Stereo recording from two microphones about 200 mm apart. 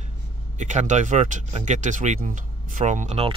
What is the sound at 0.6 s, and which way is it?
Speech, 35° right (ahead or behind).